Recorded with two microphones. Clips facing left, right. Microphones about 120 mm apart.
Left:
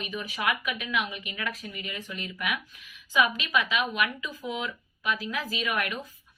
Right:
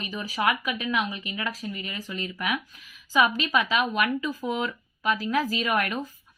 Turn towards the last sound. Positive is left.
turn(degrees=-40)  # may be behind; listen again after turning